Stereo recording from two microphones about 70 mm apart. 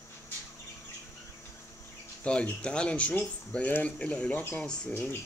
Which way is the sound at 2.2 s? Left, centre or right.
Centre.